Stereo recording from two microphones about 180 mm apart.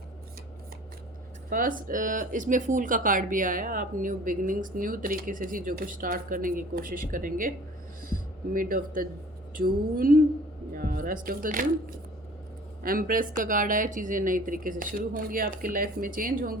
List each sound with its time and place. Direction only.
1.5 s speech: 50° right (ahead or behind)
12.8 s speech: 50° right (ahead or behind)